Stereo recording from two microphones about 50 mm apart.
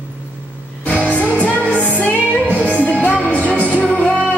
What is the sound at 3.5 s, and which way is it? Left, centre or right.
Music, right.